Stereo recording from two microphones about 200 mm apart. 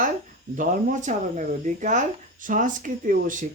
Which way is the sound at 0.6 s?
40° right (ahead or behind).